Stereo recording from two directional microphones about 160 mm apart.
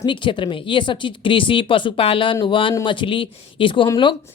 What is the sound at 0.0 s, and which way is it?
Speech, 30° left (ahead or behind).